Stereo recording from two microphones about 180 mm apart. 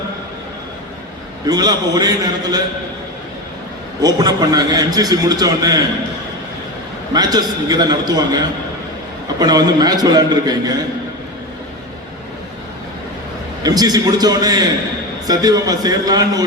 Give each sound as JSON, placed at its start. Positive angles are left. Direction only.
{"t": 1.5, "sound": "a man's voice", "side_deg": -20}
{"t": 4.0, "sound": "a man's voice", "side_deg": -20}
{"t": 7.1, "sound": "a man's voice", "side_deg": -20}
{"t": 9.4, "sound": "a man's voice", "side_deg": -20}
{"t": 13.7, "sound": "a man's voice", "side_deg": -20}